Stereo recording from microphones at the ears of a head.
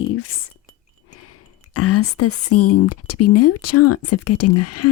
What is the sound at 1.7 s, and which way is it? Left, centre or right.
Speech, left.